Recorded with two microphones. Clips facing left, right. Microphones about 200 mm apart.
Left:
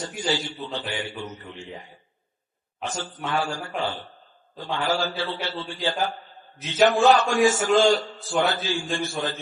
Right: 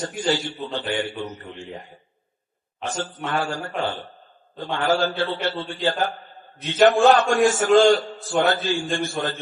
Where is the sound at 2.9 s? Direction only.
55° right (ahead or behind).